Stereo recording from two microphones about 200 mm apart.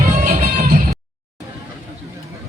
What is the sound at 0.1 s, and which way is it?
Music, 40° right (ahead or behind).